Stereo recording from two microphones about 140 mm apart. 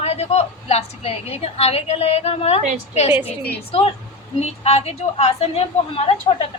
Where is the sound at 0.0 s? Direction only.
50° left (ahead or behind).